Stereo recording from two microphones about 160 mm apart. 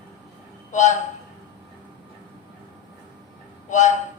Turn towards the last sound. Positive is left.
turn(degrees=50)  # may be behind; listen again after turning